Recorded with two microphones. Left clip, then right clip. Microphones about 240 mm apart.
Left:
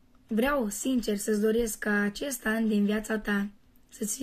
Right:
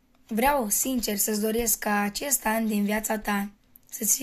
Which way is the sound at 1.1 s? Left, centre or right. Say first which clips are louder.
Left 3 dB; right.